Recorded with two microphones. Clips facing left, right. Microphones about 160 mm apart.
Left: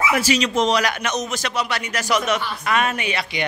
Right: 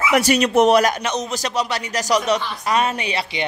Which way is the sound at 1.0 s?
30° right (ahead or behind).